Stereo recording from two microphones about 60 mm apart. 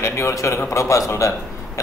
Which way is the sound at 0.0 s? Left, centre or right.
Left.